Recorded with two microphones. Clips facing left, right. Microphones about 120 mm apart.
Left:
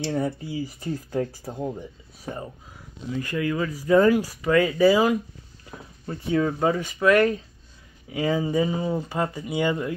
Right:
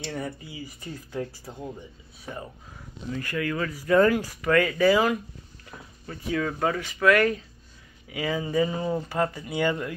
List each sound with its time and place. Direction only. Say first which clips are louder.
0.0 s speech: left 7 dB; 30° left (ahead or behind)
3.1 s speech: left 3 dB; 20° left (ahead or behind)
5.7 s speech: left 5 dB; 25° left (ahead or behind)